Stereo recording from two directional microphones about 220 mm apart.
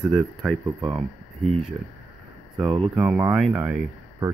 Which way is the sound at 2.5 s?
15° right (ahead or behind).